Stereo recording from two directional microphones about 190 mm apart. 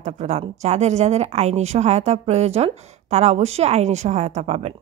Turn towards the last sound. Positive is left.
turn(degrees=-35)  # may be behind; listen again after turning